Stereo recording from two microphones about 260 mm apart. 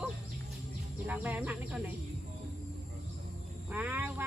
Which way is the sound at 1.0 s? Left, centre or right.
Centre.